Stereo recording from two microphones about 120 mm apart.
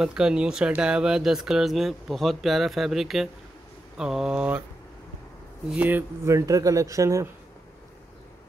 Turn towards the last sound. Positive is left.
turn(degrees=-25)  # may be behind; listen again after turning